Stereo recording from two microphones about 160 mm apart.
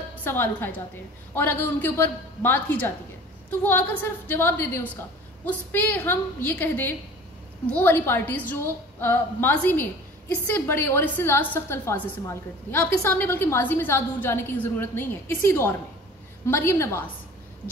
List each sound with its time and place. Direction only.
0.2 s a woman's voice: 15° left (ahead or behind)